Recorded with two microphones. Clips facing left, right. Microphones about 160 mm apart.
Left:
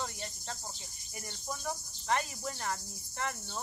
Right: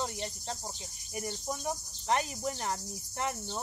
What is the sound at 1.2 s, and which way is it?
Cricket, 20° right (ahead or behind).